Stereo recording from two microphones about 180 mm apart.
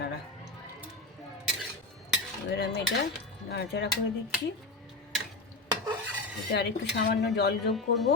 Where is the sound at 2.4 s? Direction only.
70° left (ahead or behind).